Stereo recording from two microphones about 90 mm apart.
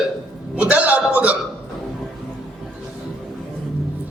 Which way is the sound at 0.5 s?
15° right (ahead or behind).